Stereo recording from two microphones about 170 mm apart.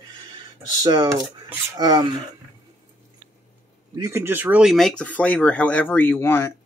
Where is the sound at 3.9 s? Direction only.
15° right (ahead or behind).